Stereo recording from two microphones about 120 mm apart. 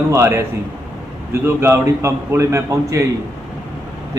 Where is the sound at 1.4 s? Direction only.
25° right (ahead or behind).